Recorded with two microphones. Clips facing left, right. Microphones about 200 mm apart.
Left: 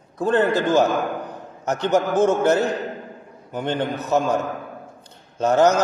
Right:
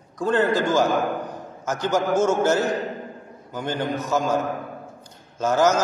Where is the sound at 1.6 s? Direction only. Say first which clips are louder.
Left 3 dB; 65° left (ahead or behind).